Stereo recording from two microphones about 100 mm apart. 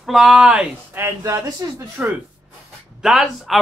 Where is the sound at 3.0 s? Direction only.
5° right (ahead or behind).